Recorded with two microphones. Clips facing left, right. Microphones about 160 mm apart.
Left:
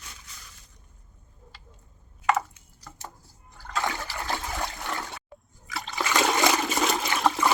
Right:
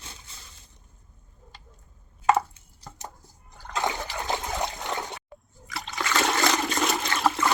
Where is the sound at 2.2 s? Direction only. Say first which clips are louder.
Right 3 dB; 30° right (ahead or behind).